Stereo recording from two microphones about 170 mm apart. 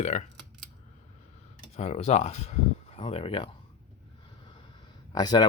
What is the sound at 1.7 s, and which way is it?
Speech, 40° left (ahead or behind).